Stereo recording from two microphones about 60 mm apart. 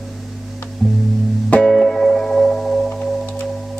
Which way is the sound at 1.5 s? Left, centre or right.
Centre.